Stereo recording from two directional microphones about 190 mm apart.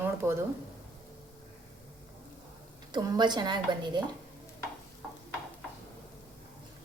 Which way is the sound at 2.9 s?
20° right (ahead or behind).